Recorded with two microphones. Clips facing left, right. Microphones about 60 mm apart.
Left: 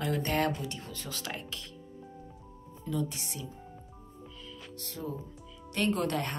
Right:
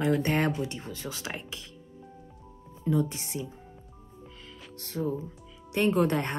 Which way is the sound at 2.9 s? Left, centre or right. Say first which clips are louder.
Right 6 dB; right.